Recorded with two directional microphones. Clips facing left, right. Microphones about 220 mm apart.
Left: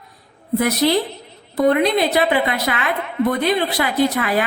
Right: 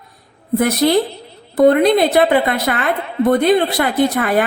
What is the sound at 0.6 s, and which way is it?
A woman's voice, 50° right (ahead or behind).